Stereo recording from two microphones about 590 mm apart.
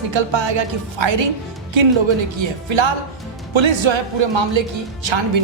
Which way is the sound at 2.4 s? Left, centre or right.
Right.